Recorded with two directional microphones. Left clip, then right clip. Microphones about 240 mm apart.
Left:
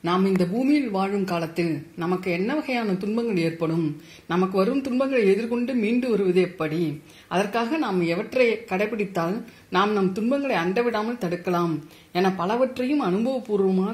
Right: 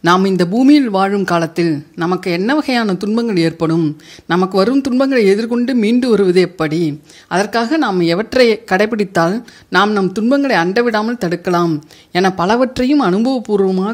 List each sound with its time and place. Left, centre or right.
0.0 s speech: right